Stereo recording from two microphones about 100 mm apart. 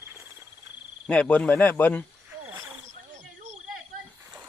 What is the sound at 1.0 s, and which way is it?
Speech, 10° left (ahead or behind).